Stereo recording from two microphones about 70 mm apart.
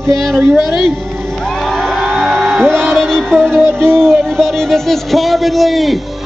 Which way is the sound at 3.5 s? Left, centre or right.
Right.